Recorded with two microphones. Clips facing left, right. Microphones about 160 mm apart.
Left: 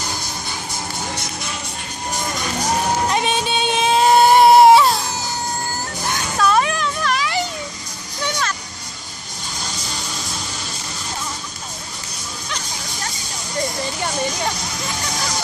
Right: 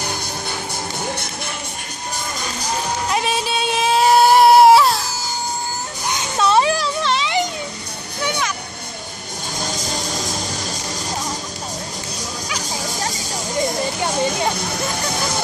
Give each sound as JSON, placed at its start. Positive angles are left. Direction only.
{"t": 3.1, "sound": "a sound", "side_deg": 0}
{"t": 6.1, "sound": "children playing", "side_deg": -20}
{"t": 8.2, "sound": "music", "side_deg": -10}